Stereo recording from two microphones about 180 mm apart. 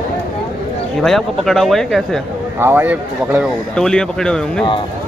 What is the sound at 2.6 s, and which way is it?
Speech, 10° right (ahead or behind).